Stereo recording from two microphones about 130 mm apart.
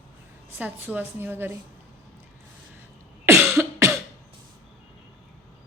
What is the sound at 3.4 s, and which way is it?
Cough, 20° right (ahead or behind).